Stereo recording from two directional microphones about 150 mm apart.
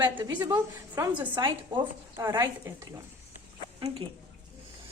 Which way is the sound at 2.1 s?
20° right (ahead or behind).